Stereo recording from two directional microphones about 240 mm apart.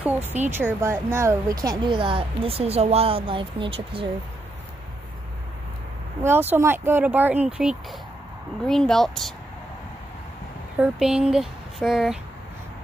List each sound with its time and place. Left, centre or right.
0.0 s speech: centre
6.2 s speech: centre
10.8 s speech: centre